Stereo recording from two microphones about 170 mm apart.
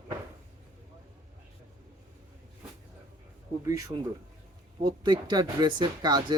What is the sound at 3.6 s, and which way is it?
A man's voice, 20° right (ahead or behind).